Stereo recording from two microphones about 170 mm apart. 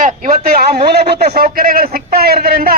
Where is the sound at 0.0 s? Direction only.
65° right (ahead or behind).